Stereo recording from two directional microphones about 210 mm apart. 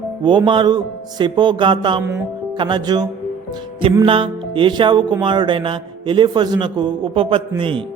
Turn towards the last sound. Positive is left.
turn(degrees=-25)  # may be behind; listen again after turning